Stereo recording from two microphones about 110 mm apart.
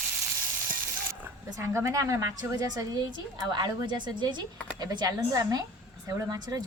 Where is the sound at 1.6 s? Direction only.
25° right (ahead or behind).